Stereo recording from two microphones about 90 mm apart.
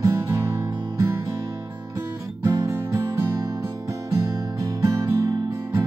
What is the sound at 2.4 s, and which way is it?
Music, 40° right (ahead or behind).